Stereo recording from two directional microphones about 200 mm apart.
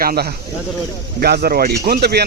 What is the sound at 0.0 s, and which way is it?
Speech, 50° right (ahead or behind).